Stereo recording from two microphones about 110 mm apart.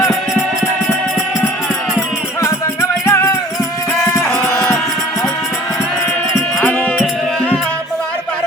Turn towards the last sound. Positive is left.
turn(degrees=10)  # may be behind; listen again after turning